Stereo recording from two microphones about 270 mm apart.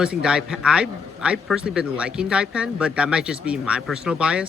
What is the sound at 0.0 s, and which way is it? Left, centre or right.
Speech, centre.